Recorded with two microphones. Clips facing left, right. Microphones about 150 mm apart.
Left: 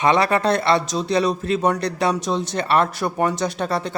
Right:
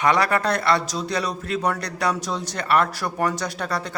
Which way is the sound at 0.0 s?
25° left (ahead or behind).